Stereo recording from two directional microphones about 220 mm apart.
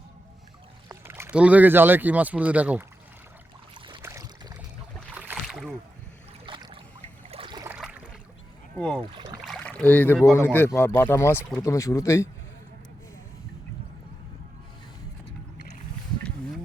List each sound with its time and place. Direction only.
0.9 s speech: 10° right (ahead or behind)
3.8 s boat: 20° right (ahead or behind); by 5.7 s centre (ahead or behind)
6.4 s boat: 20° right (ahead or behind)
7.3 s a sound: 25° right (ahead or behind)
7.8 s a sound: 5° right (ahead or behind)
9.1 s rowboat: 20° right (ahead or behind)
9.4 s rowboat: centre (ahead or behind)
10.3 s speech: 10° left (ahead or behind)